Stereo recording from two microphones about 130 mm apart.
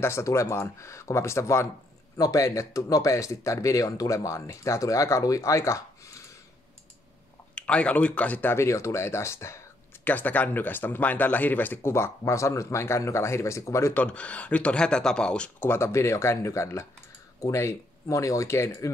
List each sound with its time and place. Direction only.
0.0 s speech: 20° left (ahead or behind)
7.5 s speech: 10° left (ahead or behind)
14.0 s speech: 10° left (ahead or behind)
15.7 s speech: 20° left (ahead or behind)